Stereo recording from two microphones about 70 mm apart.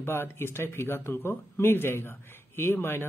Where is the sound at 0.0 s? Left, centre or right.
Left.